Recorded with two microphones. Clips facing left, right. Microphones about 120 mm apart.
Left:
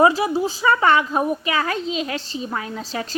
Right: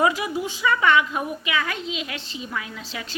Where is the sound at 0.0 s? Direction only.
35° left (ahead or behind).